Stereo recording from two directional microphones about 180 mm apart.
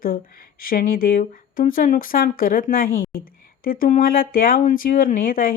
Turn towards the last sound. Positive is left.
turn(degrees=50)  # may be behind; listen again after turning